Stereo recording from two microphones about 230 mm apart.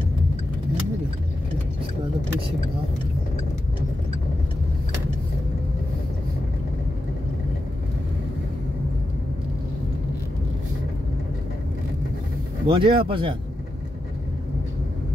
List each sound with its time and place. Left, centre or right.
12.6 s speech: right